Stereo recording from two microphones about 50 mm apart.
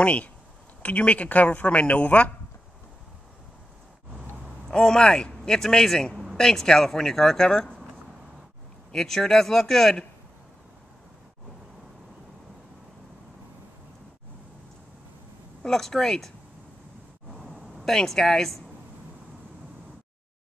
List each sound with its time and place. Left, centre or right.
0.0 s speech: left
4.6 s speech: centre
8.9 s speech: centre
15.6 s speech: centre
17.8 s speech: centre